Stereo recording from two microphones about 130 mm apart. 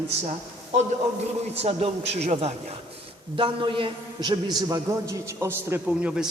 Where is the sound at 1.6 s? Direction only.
50° right (ahead or behind).